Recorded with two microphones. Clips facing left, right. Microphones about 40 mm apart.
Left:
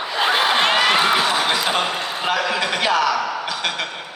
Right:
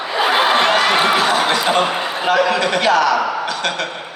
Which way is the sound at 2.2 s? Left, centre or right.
Centre.